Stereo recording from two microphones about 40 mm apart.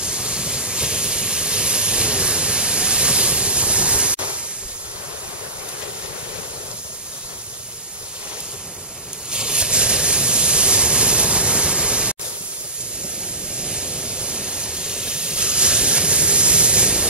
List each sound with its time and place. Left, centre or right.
0.0 s waves: right
9.3 s waves: right
13.6 s waves: right